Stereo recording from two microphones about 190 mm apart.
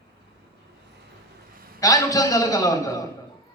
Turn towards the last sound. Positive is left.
turn(degrees=15)  # may be behind; listen again after turning